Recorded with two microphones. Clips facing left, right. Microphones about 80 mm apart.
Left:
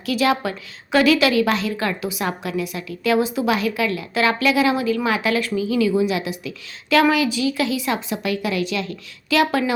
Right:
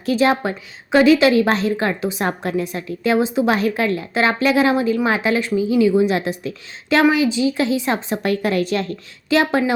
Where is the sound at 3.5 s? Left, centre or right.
Right.